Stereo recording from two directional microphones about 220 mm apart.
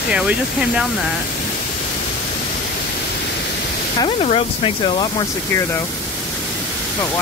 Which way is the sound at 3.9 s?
25° left (ahead or behind).